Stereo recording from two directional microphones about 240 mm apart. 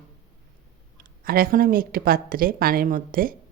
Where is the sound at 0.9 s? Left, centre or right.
Right.